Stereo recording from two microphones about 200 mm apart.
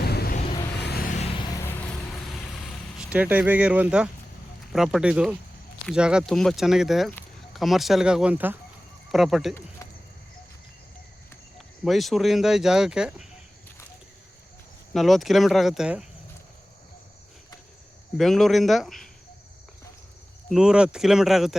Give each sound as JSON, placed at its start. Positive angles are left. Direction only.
{"t": 0.0, "sound": "a sound", "side_deg": 50}
{"t": 0.8, "sound": "vehicle", "side_deg": 50}
{"t": 1.4, "sound": "vehicle", "side_deg": 15}
{"t": 2.6, "sound": "speech", "side_deg": -5}
{"t": 11.5, "sound": "speech", "side_deg": 0}
{"t": 14.9, "sound": "speech", "side_deg": 0}
{"t": 18.2, "sound": "speech", "side_deg": 0}
{"t": 20.5, "sound": "speech", "side_deg": -5}